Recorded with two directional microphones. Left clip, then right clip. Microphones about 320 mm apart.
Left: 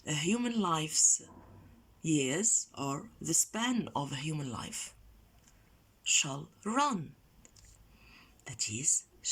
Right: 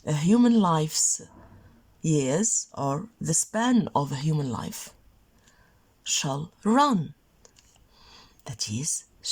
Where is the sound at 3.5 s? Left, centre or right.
Right.